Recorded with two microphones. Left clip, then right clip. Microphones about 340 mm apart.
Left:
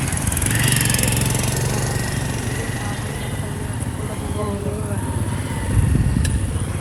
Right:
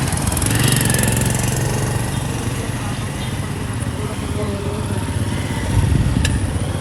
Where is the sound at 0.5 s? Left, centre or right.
Right.